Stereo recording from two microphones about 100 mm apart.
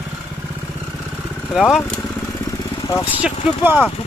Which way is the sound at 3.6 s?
20° right (ahead or behind).